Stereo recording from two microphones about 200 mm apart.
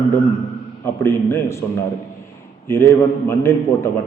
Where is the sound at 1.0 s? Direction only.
10° left (ahead or behind).